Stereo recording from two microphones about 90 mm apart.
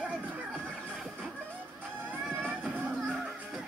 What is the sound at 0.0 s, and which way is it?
Music, 15° right (ahead or behind).